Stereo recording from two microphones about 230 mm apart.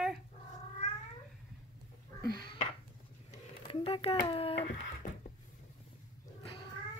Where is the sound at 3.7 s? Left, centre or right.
Left.